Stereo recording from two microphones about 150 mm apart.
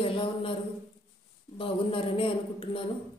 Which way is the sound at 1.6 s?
35° left (ahead or behind).